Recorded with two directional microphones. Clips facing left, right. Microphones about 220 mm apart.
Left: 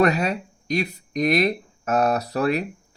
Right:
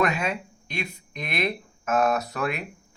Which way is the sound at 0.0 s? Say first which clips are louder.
Left 5 dB; 40° left (ahead or behind).